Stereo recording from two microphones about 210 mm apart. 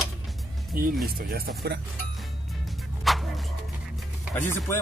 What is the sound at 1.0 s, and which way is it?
Speech, 45° right (ahead or behind).